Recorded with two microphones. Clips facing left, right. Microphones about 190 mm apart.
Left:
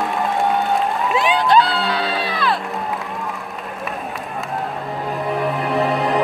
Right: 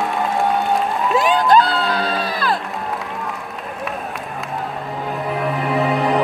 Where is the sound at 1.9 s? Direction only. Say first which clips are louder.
Right 1 dB; 45° right (ahead or behind).